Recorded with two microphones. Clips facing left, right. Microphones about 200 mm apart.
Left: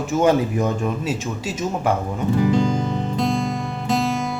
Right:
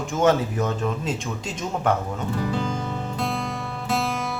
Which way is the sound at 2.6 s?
20° left (ahead or behind).